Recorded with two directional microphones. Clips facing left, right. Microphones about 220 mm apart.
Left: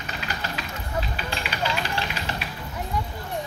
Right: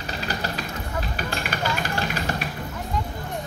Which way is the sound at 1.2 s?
50° right (ahead or behind).